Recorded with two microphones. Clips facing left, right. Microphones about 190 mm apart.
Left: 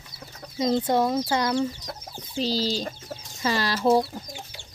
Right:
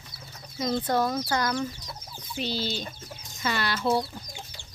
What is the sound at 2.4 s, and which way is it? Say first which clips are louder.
Speech: left 5 dB; 35° left (ahead or behind).